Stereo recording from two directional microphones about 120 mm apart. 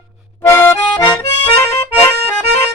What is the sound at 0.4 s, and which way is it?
Accordion, 20° left (ahead or behind).